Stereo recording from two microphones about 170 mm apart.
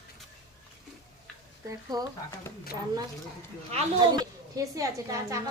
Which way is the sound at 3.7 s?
40° right (ahead or behind).